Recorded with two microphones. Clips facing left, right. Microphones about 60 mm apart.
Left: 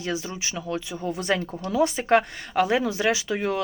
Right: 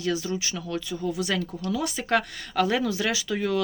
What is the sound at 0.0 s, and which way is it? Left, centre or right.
A woman's voice, left.